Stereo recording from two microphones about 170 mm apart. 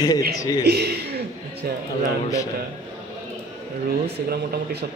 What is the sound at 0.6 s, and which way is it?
Speech, 75° right (ahead or behind).